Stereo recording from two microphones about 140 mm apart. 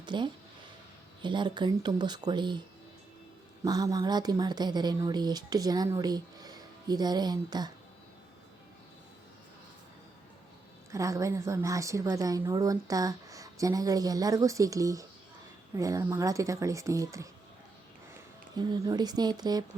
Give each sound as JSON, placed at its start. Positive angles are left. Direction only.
{"t": 0.0, "sound": "speech", "side_deg": -35}
{"t": 3.6, "sound": "speech", "side_deg": -25}
{"t": 10.9, "sound": "speech", "side_deg": -20}
{"t": 18.5, "sound": "speech", "side_deg": -30}